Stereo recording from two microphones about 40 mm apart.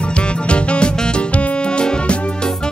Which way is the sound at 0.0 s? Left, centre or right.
Left.